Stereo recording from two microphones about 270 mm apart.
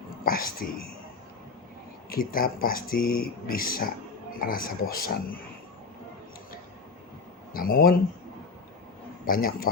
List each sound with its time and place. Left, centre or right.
0.3 s speech: left
2.0 s speech: left
7.5 s speech: left
9.2 s speech: left